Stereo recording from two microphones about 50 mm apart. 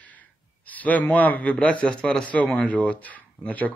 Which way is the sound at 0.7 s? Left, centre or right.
Left.